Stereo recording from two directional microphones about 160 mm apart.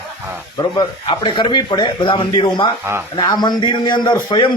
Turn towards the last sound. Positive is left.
turn(degrees=30)  # may be behind; listen again after turning